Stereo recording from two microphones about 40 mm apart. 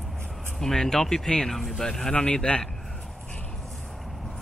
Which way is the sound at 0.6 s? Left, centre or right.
Centre.